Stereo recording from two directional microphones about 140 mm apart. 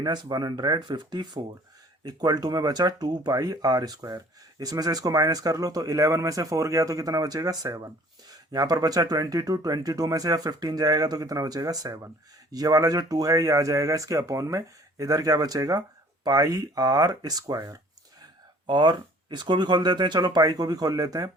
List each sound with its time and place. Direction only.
0.0 s speech: 30° right (ahead or behind)